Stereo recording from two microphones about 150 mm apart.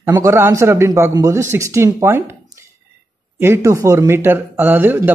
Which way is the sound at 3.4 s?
20° right (ahead or behind).